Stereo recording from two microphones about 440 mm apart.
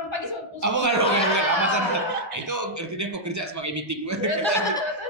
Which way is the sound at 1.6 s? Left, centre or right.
Right.